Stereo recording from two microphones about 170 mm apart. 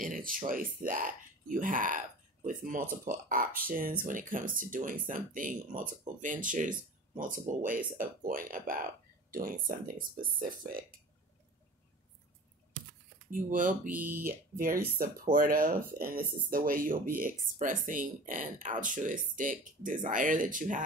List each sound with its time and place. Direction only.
0.0 s speech: 55° right (ahead or behind)
13.3 s speech: 50° right (ahead or behind)
13.8 s speech: 10° right (ahead or behind)
14.2 s speech: 55° right (ahead or behind)